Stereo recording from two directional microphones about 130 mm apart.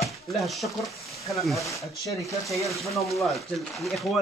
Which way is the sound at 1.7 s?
25° left (ahead or behind).